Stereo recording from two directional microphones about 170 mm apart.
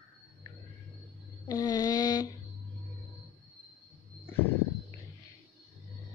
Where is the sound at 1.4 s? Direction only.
20° left (ahead or behind).